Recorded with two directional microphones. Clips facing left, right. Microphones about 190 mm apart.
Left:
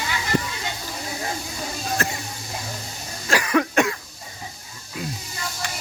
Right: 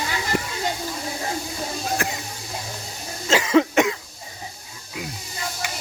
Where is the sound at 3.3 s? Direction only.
20° right (ahead or behind).